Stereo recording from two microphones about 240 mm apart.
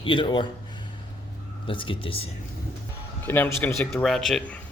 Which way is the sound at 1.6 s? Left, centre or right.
Left.